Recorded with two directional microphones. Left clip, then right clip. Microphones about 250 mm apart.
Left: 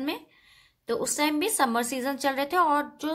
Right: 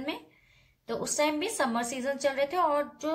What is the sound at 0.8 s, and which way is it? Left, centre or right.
A woman's voice, left.